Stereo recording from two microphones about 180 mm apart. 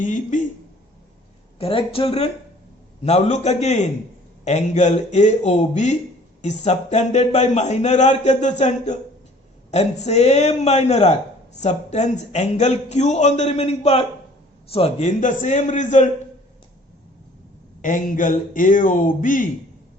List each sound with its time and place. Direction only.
0.0 s a man's voice: 45° left (ahead or behind)
1.5 s a man's voice: 30° left (ahead or behind)
17.8 s a man's voice: 45° left (ahead or behind)